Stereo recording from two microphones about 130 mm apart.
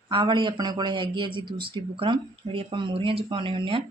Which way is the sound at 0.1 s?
40° right (ahead or behind).